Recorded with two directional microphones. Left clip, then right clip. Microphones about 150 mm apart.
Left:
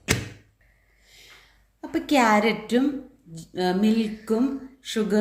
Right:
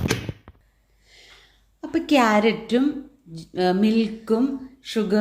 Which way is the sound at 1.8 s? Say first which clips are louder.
Right 2 dB; 55° right (ahead or behind).